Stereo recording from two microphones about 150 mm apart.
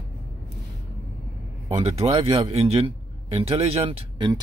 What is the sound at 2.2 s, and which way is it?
Speech, 35° right (ahead or behind).